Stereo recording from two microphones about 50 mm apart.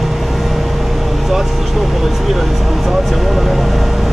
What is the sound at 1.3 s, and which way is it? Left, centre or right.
Vehicle, centre.